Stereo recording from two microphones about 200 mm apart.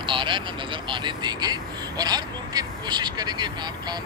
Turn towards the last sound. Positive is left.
turn(degrees=-20)  # may be behind; listen again after turning